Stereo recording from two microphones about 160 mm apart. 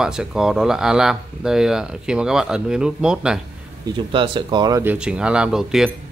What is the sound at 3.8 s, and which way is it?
Speech, 30° right (ahead or behind).